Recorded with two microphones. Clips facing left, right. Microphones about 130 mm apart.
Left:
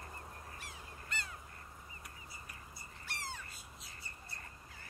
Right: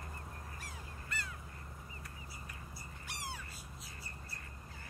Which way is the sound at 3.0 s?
15° right (ahead or behind).